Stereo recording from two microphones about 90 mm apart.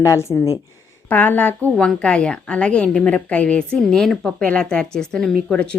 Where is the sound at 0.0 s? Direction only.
30° left (ahead or behind).